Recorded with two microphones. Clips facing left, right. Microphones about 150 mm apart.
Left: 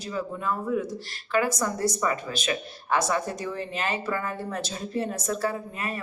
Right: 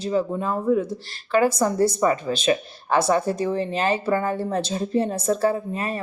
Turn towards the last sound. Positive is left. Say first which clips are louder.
# right 7 dB
turn(degrees=-30)  # may be behind; listen again after turning